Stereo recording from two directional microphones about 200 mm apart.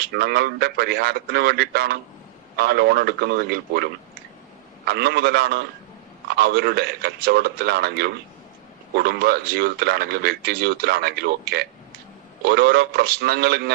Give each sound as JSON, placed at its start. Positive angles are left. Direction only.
{"t": 0.0, "sound": "speech", "side_deg": -50}
{"t": 4.9, "sound": "speech", "side_deg": -50}